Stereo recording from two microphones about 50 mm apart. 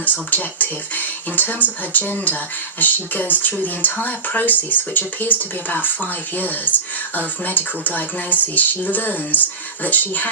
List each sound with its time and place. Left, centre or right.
0.0 s speech: left